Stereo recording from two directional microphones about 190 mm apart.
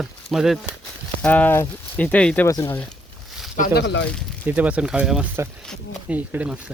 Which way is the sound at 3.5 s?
50° left (ahead or behind).